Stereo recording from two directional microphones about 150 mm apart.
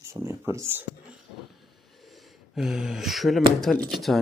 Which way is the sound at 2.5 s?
5° right (ahead or behind).